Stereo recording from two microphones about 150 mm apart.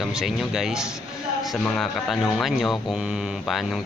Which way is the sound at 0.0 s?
Centre (ahead or behind).